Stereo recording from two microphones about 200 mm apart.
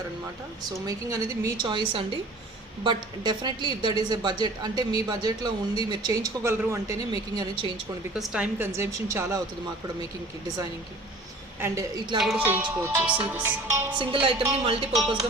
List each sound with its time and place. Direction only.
0.9 s a woman's voice: 15° right (ahead or behind)
8.1 s a woman's voice: 5° right (ahead or behind)
11.6 s a woman's voice: 15° right (ahead or behind)
14.0 s a woman's voice: 25° right (ahead or behind)